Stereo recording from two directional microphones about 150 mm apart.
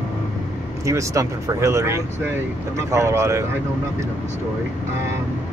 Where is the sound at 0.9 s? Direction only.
20° right (ahead or behind).